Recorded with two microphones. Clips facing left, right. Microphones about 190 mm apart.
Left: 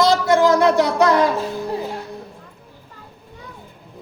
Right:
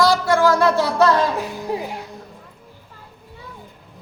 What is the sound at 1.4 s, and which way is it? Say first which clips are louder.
Music: left 1 dB; 10° right (ahead or behind).